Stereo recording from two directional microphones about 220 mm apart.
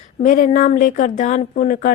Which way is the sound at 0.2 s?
35° left (ahead or behind).